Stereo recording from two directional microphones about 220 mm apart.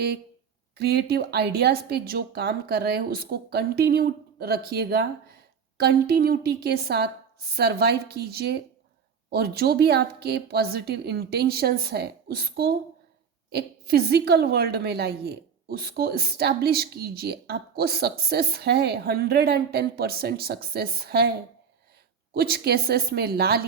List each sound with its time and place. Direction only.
0.8 s a woman's voice: 45° right (ahead or behind)
22.4 s a woman's voice: 45° right (ahead or behind)